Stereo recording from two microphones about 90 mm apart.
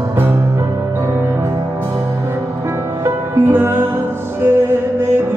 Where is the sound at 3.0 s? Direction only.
25° right (ahead or behind).